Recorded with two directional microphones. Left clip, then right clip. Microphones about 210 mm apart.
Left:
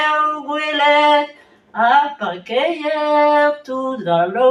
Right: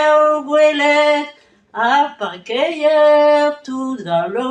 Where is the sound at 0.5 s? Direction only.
35° right (ahead or behind).